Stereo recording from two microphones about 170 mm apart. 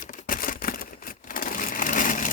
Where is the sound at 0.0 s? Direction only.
50° left (ahead or behind).